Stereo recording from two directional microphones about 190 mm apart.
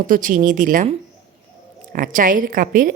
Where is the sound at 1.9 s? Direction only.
45° right (ahead or behind).